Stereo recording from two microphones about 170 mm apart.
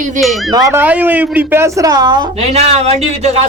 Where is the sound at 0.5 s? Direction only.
15° right (ahead or behind).